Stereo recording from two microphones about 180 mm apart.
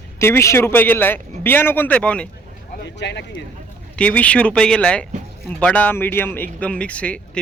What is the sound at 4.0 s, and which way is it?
A man's voice, 10° left (ahead or behind).